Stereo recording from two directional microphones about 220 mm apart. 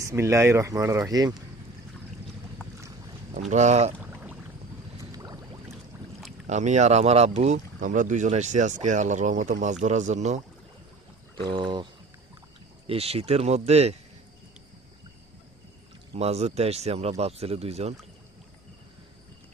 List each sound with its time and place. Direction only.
0.0 s speech: 15° right (ahead or behind)
3.5 s speech: 30° right (ahead or behind)
3.9 s a sound: 10° right (ahead or behind)
6.5 s speech: 30° right (ahead or behind)
11.3 s speech: 20° right (ahead or behind)
12.9 s speech: 25° right (ahead or behind)
16.1 s speech: 30° right (ahead or behind)